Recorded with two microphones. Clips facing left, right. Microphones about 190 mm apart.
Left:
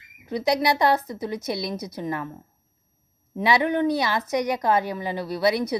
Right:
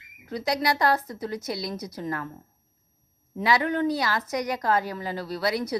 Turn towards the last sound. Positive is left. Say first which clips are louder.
# left 4 dB
turn(degrees=25)  # may be behind; listen again after turning